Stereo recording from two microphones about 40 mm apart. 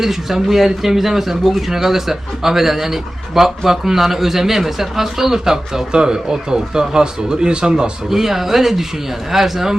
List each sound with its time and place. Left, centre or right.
0.0 s speech: centre